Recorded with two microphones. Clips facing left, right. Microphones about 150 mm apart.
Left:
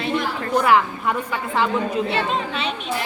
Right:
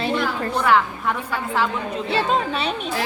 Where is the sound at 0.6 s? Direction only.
5° left (ahead or behind).